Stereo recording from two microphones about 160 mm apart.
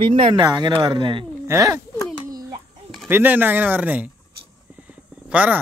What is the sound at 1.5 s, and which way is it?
Speech, 20° right (ahead or behind).